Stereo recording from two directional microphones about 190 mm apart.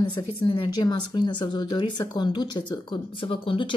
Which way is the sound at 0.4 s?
25° left (ahead or behind).